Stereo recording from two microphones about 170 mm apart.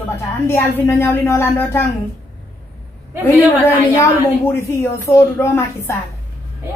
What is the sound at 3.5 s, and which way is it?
A woman's voice, 10° left (ahead or behind).